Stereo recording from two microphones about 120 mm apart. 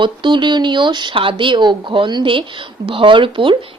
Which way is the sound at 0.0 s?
40° right (ahead or behind).